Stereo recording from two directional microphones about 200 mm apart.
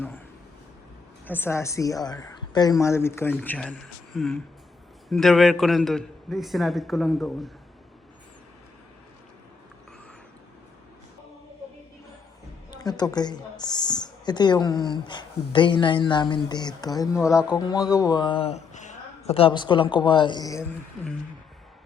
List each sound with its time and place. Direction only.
1.3 s a woman's voice: 10° left (ahead or behind)
12.7 s speech: 20° left (ahead or behind)